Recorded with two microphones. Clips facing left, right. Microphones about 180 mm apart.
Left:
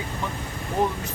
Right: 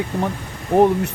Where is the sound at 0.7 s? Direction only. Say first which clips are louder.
Right 10 dB; 65° right (ahead or behind).